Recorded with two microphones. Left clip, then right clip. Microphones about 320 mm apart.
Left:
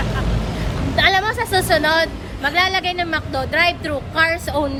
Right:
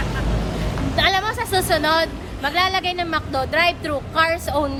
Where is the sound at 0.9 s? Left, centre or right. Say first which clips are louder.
Left 3 dB; centre.